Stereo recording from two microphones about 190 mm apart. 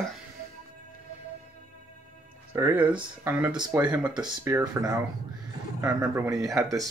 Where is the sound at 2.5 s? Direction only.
10° right (ahead or behind).